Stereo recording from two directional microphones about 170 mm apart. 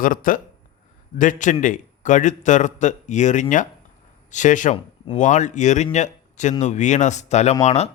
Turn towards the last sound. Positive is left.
turn(degrees=40)  # may be behind; listen again after turning